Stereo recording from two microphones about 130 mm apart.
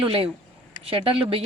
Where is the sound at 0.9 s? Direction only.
45° right (ahead or behind).